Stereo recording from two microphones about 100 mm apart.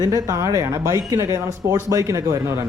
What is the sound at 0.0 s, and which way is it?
A woman's voice, 30° right (ahead or behind).